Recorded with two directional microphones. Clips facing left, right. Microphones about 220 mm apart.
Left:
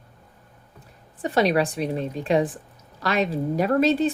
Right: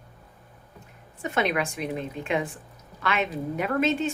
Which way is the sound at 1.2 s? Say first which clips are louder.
Left 5 dB; 35° left (ahead or behind).